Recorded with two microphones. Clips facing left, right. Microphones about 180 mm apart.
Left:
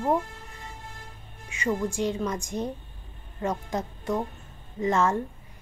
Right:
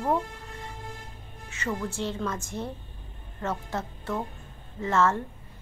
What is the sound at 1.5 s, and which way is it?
A woman's voice, 15° left (ahead or behind).